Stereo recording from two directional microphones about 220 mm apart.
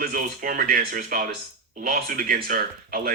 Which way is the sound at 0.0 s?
40° right (ahead or behind).